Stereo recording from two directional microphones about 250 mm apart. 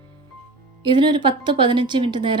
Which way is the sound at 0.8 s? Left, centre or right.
Centre.